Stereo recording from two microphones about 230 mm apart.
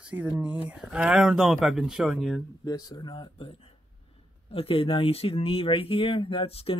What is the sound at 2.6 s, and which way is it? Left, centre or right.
Speech, centre.